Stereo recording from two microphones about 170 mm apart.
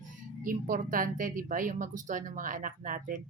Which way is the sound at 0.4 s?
55° right (ahead or behind).